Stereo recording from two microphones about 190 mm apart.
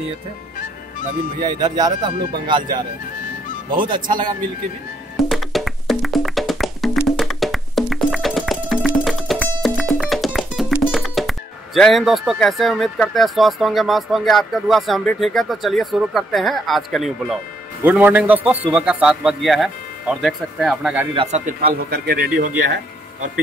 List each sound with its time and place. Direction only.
1.6 s speech: 20° right (ahead or behind)
3.7 s speech: 25° right (ahead or behind)
5.3 s music: centre (ahead or behind)
17.8 s speech: 10° right (ahead or behind)
21.1 s speech: 30° right (ahead or behind)
21.5 s speech: 50° right (ahead or behind)